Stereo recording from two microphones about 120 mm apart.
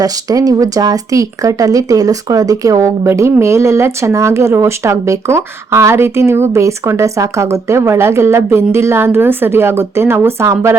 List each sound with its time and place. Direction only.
0.0 s speech: 30° right (ahead or behind)